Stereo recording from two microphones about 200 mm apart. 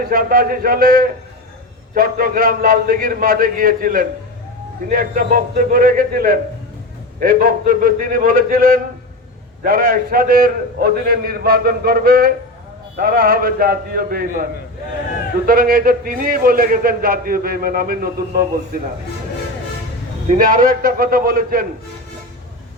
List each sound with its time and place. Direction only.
0.0 s a man's voice: 45° right (ahead or behind)
15.4 s a man's voice: 45° right (ahead or behind)
20.2 s a man's voice: 40° right (ahead or behind)